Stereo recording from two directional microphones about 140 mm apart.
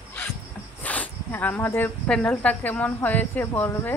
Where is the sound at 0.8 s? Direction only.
10° left (ahead or behind).